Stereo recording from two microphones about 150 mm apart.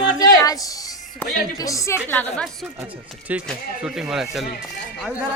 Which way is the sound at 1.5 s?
20° left (ahead or behind).